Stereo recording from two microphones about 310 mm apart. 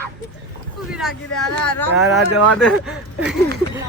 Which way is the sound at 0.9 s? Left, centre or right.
Centre.